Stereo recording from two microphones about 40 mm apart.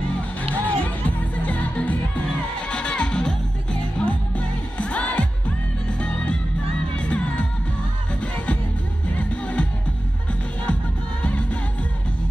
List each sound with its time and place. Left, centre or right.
0.4 s music: left
9.1 s music: left
11.2 s music: left